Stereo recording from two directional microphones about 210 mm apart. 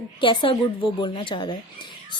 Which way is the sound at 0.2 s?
25° left (ahead or behind).